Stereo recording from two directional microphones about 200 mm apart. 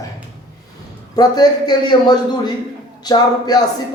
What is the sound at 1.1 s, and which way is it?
A man's voice, 20° left (ahead or behind).